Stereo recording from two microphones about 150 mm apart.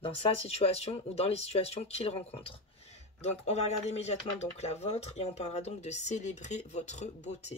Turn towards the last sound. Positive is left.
turn(degrees=50)  # may be behind; listen again after turning